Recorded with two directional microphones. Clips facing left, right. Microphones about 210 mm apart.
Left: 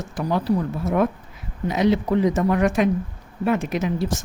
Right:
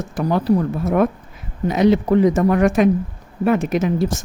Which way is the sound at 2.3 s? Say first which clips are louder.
Right 4 dB; 50° right (ahead or behind).